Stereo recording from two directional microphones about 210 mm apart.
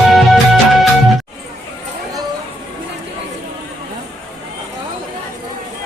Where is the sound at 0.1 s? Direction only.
Centre (ahead or behind).